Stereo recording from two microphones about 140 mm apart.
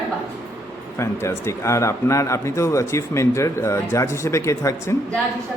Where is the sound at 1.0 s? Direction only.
20° left (ahead or behind).